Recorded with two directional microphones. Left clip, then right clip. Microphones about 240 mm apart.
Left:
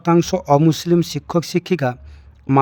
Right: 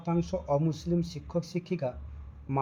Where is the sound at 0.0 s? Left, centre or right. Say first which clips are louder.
Left 15 dB; left.